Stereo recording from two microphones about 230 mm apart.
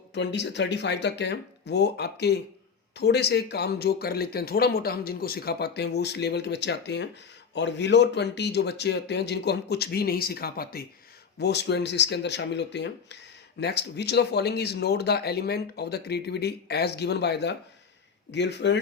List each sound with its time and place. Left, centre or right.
0.1 s speech: left